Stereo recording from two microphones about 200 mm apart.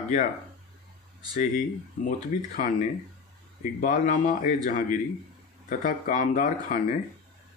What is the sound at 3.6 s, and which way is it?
Speech, 40° left (ahead or behind).